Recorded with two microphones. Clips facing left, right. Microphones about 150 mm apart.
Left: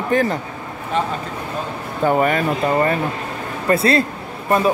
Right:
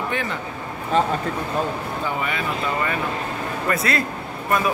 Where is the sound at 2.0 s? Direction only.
45° left (ahead or behind).